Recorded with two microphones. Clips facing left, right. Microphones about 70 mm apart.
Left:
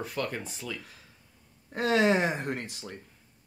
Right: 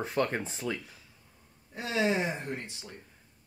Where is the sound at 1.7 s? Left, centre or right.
Left.